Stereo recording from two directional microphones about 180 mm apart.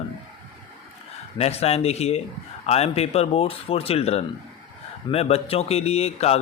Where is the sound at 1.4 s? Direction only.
35° left (ahead or behind).